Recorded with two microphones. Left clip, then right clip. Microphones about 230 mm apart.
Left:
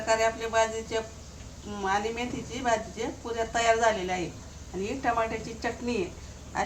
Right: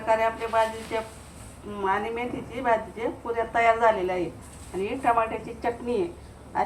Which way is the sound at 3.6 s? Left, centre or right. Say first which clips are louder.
Right 3 dB; left.